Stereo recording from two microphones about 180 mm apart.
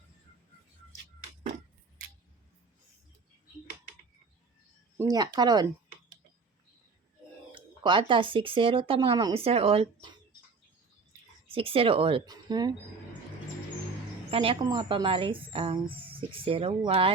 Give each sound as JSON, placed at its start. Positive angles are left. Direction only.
{"t": 4.9, "sound": "speech", "side_deg": -20}
{"t": 7.5, "sound": "speech", "side_deg": -25}
{"t": 11.4, "sound": "speech", "side_deg": -30}
{"t": 14.3, "sound": "speech", "side_deg": -30}